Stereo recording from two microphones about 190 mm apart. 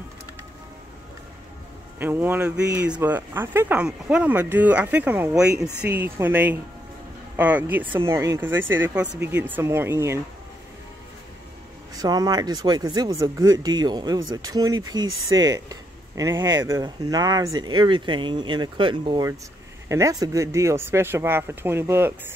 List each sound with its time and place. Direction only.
2.0 s speech: 10° right (ahead or behind)
11.9 s speech: 20° right (ahead or behind)